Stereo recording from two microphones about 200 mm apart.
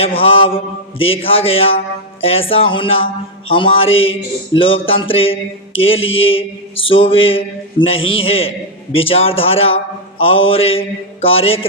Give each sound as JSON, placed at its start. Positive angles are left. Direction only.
{"t": 0.0, "sound": "mantra", "side_deg": 30}